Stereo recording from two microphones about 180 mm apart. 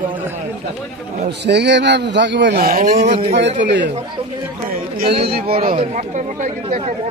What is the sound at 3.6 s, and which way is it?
Speech, 80° right.